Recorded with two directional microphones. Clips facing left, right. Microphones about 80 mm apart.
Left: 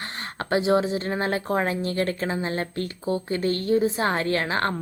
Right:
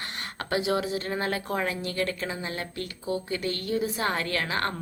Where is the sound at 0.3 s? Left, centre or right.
Left.